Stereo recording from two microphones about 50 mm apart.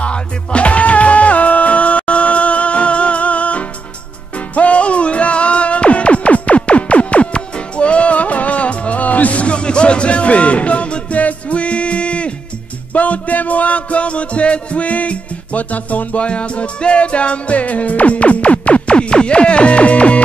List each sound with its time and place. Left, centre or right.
0.0 s music: left